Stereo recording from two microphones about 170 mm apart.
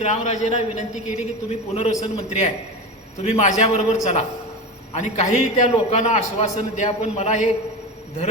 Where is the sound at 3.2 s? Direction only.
40° left (ahead or behind).